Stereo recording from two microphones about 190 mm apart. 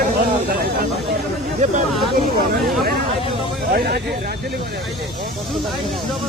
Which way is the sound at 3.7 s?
55° right (ahead or behind).